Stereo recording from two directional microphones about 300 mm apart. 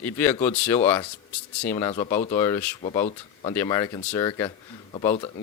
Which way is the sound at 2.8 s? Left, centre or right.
Centre.